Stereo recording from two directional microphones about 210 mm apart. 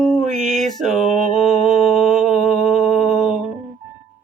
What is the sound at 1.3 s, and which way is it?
Mantra, centre (ahead or behind).